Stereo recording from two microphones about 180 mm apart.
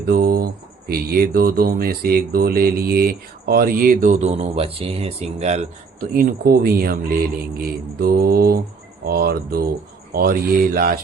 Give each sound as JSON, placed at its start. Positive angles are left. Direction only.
{"t": 0.1, "sound": "speech", "side_deg": -55}
{"t": 6.1, "sound": "speech", "side_deg": -55}